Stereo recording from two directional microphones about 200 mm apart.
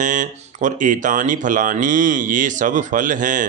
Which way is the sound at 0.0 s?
40° right (ahead or behind).